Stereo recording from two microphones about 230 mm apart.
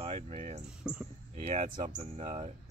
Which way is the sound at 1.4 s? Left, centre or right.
Right.